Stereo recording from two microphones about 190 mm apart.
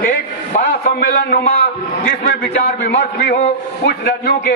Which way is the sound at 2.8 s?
55° left (ahead or behind).